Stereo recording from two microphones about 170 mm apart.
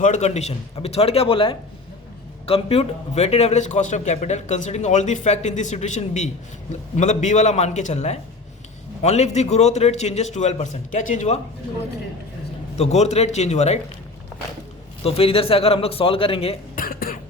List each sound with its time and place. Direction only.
0.0 s a man's voice: 45° left (ahead or behind)
12.7 s a man's voice: 40° left (ahead or behind)
15.0 s a man's voice: 35° left (ahead or behind)
16.7 s a sound: 55° left (ahead or behind)